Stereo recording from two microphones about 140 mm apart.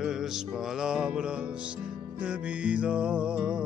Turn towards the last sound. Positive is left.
turn(degrees=-5)  # may be behind; listen again after turning